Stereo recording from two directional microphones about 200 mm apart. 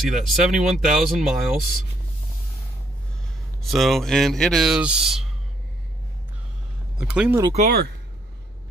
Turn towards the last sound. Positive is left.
turn(degrees=-45)  # may be behind; listen again after turning